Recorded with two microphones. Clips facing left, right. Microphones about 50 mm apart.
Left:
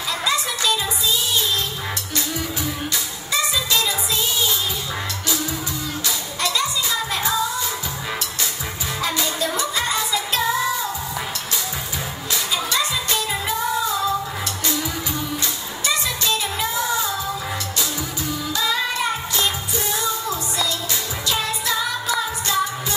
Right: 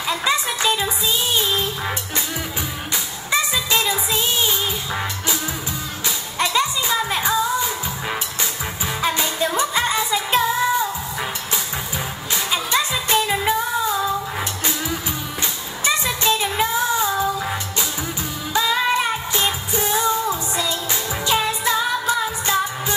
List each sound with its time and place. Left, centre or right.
0.2 s music: right
3.3 s music: right
6.0 s music: right
9.0 s music: right
12.7 s music: right
15.8 s music: right
19.3 s music: right
21.3 s music: right